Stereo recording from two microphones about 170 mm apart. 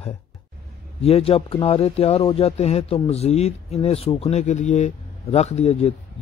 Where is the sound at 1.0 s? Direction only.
35° left (ahead or behind).